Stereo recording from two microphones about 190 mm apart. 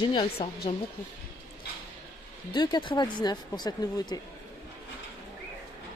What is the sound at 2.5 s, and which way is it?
Speech, 25° left (ahead or behind).